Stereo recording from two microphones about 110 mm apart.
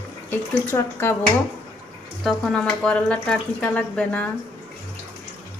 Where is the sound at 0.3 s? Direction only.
20° left (ahead or behind).